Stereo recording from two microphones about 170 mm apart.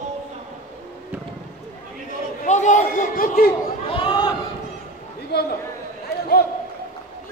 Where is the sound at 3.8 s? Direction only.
30° left (ahead or behind).